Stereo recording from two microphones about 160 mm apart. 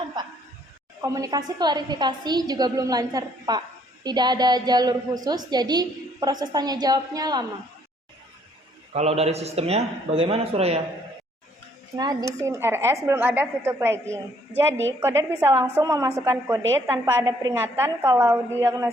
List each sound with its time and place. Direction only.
1.0 s a woman's voice: 20° right (ahead or behind)
8.9 s a man's voice: 40° right (ahead or behind)
12.4 s a woman's voice: 15° right (ahead or behind)